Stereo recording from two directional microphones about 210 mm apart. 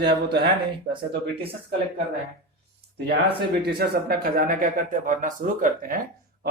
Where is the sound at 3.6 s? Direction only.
50° right (ahead or behind).